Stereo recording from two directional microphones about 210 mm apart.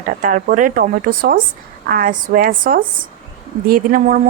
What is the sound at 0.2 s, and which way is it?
Speech, 40° right (ahead or behind).